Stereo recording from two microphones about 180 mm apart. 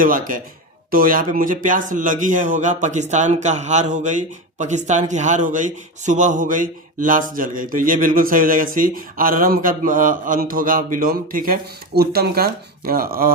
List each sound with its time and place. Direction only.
0.0 s a man's voice: 50° right (ahead or behind)